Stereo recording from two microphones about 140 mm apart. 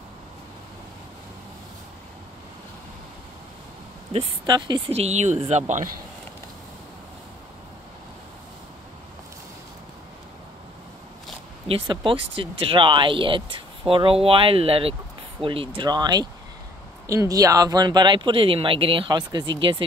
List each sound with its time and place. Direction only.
4.5 s speech: 30° right (ahead or behind)
4.9 s speech: 50° right (ahead or behind)
11.6 s speech: 40° right (ahead or behind)